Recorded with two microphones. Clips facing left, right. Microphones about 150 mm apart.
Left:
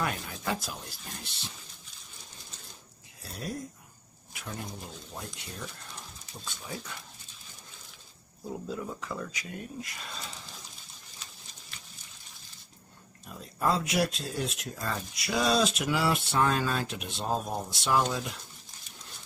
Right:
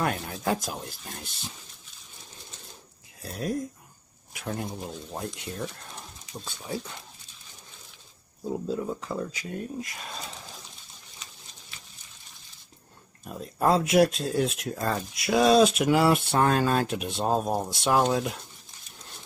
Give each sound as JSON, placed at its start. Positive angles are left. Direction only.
{"t": 0.0, "sound": "speech", "side_deg": -45}
{"t": 0.7, "sound": "speech", "side_deg": 0}
{"t": 3.2, "sound": "speech", "side_deg": -50}
{"t": 8.6, "sound": "speech", "side_deg": -30}
{"t": 9.8, "sound": "speech", "side_deg": -50}
{"t": 13.3, "sound": "speech", "side_deg": -50}